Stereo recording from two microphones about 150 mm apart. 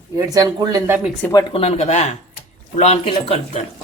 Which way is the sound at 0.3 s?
25° right (ahead or behind).